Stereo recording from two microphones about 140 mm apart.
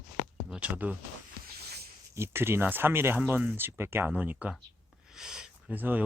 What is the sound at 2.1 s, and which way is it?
Speech, 20° right (ahead or behind).